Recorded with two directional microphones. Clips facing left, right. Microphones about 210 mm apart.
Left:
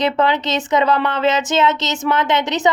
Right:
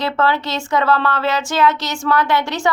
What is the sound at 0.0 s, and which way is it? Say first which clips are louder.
Speech: left 2 dB; 20° left (ahead or behind).